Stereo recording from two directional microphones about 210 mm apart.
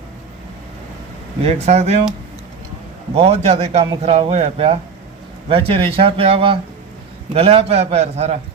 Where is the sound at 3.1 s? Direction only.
30° right (ahead or behind).